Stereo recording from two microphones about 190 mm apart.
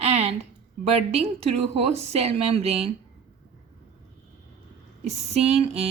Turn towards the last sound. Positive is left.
turn(degrees=-35)  # may be behind; listen again after turning